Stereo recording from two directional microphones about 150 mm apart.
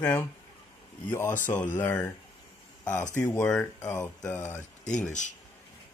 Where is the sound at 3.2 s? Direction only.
20° left (ahead or behind).